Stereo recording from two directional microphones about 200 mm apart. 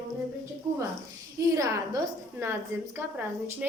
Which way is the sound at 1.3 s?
15° right (ahead or behind).